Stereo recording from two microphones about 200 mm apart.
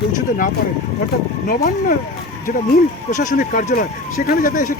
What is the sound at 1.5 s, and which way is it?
Speech, 45° left (ahead or behind).